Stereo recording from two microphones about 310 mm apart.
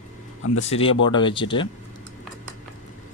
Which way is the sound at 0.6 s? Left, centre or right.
Centre.